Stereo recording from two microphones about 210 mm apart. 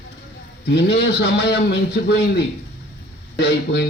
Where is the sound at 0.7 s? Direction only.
55° left (ahead or behind).